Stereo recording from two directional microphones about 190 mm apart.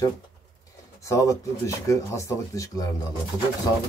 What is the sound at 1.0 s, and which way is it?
Speech, 15° left (ahead or behind).